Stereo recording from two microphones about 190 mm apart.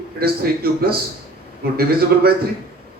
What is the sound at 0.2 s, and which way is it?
Speech, 55° right (ahead or behind).